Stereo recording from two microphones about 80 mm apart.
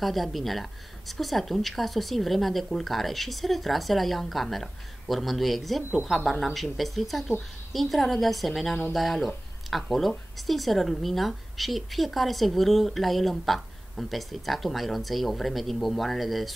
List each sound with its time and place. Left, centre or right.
0.0 s speech: centre